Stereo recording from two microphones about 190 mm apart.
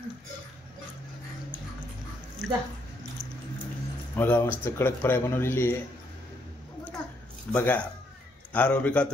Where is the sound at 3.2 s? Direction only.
30° right (ahead or behind).